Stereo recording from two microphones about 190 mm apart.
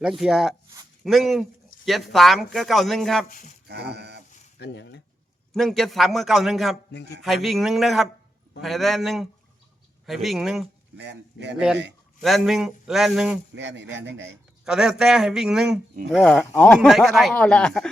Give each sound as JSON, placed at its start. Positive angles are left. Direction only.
{"t": 0.0, "sound": "speech", "side_deg": 0}
{"t": 3.2, "sound": "speech", "side_deg": 45}
{"t": 3.7, "sound": "a sound", "side_deg": -60}
{"t": 4.5, "sound": "speech", "side_deg": 65}
{"t": 5.5, "sound": "speech", "side_deg": 0}
{"t": 10.9, "sound": "a man's voice", "side_deg": -65}
{"t": 12.2, "sound": "speech", "side_deg": 0}
{"t": 13.5, "sound": "a man's voice", "side_deg": -70}
{"t": 14.6, "sound": "speech", "side_deg": -5}